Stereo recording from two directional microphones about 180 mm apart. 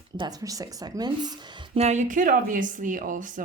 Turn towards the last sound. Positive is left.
turn(degrees=-45)  # may be behind; listen again after turning